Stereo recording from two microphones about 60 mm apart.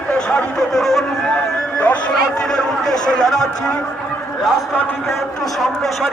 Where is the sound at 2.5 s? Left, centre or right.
Centre.